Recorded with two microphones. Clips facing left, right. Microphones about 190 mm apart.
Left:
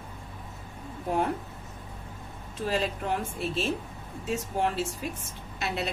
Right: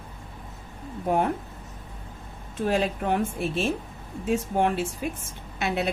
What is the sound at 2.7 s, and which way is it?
A woman's voice, 55° right (ahead or behind).